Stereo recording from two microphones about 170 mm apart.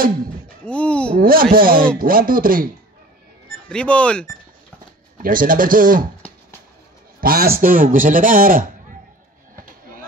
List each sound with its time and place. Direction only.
0.7 s speech: 5° left (ahead or behind)
1.2 s a man's voice: 55° right (ahead or behind)
3.6 s speech: 5° left (ahead or behind)
5.2 s speech: 55° right (ahead or behind)
7.2 s a man's voice: 60° right (ahead or behind)